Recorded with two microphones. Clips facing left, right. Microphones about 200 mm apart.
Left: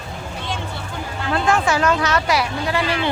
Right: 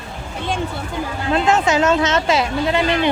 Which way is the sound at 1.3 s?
20° right (ahead or behind).